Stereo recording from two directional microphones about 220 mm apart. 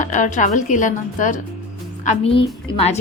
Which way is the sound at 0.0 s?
35° left (ahead or behind).